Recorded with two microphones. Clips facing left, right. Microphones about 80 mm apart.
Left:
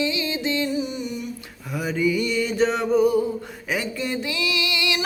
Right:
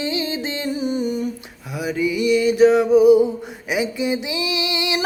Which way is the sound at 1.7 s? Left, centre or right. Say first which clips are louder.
Right 1 dB; centre.